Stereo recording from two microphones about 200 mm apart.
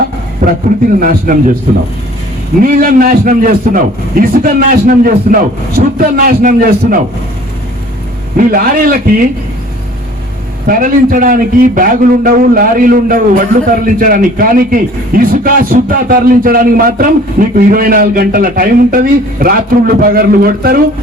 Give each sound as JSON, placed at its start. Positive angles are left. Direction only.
{"t": 0.4, "sound": "a man's voice", "side_deg": -40}
{"t": 2.6, "sound": "a man's voice", "side_deg": -45}
{"t": 8.4, "sound": "a man's voice", "side_deg": -45}
{"t": 10.7, "sound": "a man's voice", "side_deg": -45}